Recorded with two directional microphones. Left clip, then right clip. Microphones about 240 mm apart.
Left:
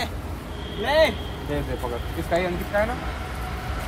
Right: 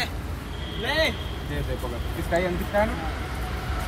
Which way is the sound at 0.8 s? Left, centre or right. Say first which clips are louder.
Left 5 dB; left.